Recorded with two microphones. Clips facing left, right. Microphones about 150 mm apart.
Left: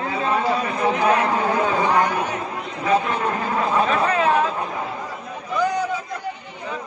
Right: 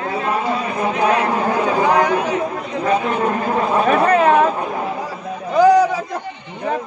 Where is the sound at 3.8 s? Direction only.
55° right (ahead or behind).